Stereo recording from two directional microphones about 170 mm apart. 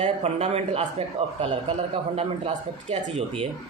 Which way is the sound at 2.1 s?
35° right (ahead or behind).